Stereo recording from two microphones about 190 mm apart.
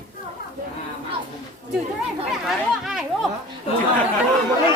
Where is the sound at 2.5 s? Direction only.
Centre (ahead or behind).